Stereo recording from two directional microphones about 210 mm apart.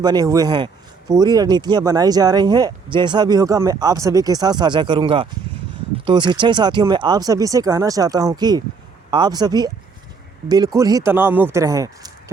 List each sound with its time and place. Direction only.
0.0 s speech: 20° right (ahead or behind)
10.8 s speech: 15° right (ahead or behind)